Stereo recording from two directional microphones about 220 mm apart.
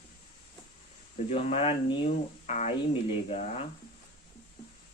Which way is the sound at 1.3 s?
25° left (ahead or behind).